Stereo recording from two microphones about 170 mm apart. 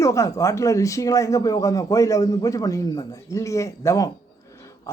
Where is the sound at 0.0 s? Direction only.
20° left (ahead or behind).